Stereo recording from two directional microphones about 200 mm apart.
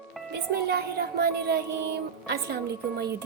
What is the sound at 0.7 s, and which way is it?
A woman's voice, 55° right (ahead or behind).